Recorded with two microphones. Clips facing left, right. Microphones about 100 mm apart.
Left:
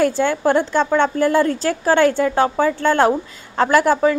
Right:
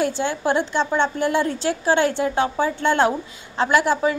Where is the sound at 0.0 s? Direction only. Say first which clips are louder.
Left 5 dB; 50° left (ahead or behind).